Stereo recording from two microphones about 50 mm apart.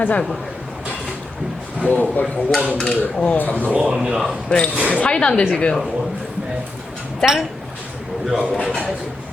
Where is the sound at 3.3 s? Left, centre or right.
Left.